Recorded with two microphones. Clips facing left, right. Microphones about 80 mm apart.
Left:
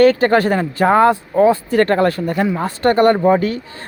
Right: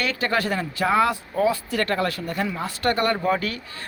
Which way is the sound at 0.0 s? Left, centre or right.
Left.